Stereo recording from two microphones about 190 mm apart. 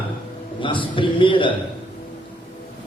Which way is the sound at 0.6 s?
25° left (ahead or behind).